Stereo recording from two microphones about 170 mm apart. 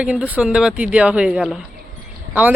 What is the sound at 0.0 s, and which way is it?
Speech, 5° right (ahead or behind).